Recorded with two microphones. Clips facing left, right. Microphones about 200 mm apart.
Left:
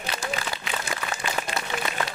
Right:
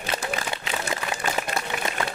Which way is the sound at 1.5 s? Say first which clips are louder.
Right 2 dB; 45° right (ahead or behind).